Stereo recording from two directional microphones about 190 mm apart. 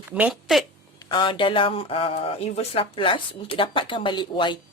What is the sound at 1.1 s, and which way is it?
Speech, 25° left (ahead or behind).